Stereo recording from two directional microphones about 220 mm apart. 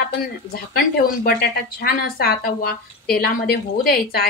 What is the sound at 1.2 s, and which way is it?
Speech, 45° left (ahead or behind).